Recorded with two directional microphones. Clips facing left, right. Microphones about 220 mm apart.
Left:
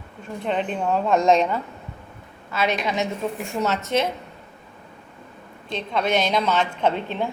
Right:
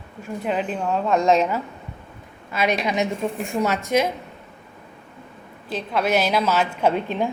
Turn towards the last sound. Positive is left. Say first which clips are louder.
# right 2 dB
turn(degrees=-10)  # may be behind; listen again after turning